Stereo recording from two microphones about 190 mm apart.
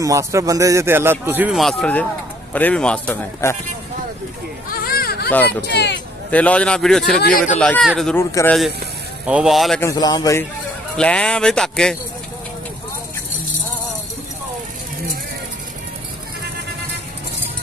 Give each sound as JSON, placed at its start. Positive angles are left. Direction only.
{"t": 0.0, "sound": "a man's voice", "side_deg": -15}
{"t": 4.8, "sound": "children playing", "side_deg": 50}
{"t": 5.7, "sound": "speech", "side_deg": 65}
{"t": 6.3, "sound": "speech", "side_deg": 5}
{"t": 7.2, "sound": "speech", "side_deg": 55}
{"t": 7.5, "sound": "a man's voice", "side_deg": 5}
{"t": 9.2, "sound": "speech", "side_deg": -5}
{"t": 9.8, "sound": "a man's voice", "side_deg": 20}
{"t": 11.0, "sound": "speech", "side_deg": 5}